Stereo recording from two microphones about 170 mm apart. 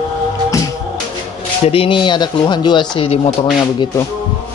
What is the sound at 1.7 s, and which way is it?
Speech, 30° left (ahead or behind).